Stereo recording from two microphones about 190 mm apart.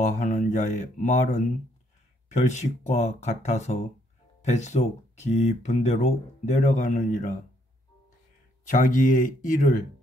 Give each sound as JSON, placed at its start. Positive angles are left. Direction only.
{"t": 0.0, "sound": "speech", "side_deg": 40}
{"t": 8.6, "sound": "speech", "side_deg": 45}